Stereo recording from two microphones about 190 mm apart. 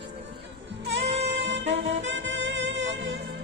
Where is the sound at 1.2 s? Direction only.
60° right (ahead or behind).